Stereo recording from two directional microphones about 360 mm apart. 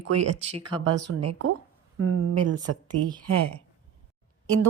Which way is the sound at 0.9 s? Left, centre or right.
Right.